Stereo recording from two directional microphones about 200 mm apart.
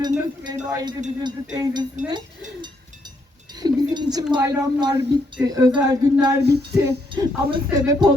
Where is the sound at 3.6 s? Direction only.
20° right (ahead or behind).